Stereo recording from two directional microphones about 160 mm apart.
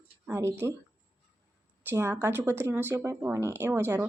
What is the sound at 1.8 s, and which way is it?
Speech, 15° right (ahead or behind).